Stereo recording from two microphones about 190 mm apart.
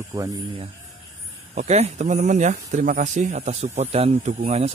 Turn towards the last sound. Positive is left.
turn(degrees=-35)  # may be behind; listen again after turning